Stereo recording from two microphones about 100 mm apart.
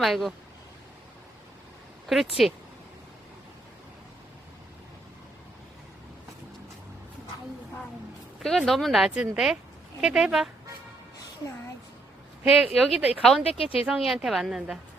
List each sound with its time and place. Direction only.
0.0 s speech: centre (ahead or behind)
2.4 s speech: centre (ahead or behind)
8.4 s speech: 5° left (ahead or behind)
12.4 s speech: 10° right (ahead or behind)
13.4 s speech: 75° left (ahead or behind)
13.8 s speech: 5° right (ahead or behind)